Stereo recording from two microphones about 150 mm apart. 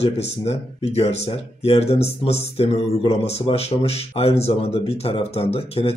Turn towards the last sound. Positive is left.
turn(degrees=40)  # may be behind; listen again after turning